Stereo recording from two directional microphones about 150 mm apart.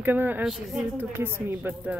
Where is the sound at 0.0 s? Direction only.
10° right (ahead or behind).